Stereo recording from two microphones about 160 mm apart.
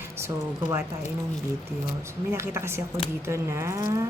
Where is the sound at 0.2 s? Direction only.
15° right (ahead or behind).